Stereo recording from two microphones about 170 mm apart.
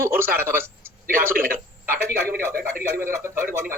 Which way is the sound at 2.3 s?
60° right (ahead or behind).